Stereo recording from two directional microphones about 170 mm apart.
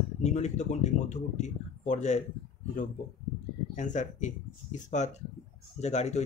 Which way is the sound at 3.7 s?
45° left (ahead or behind).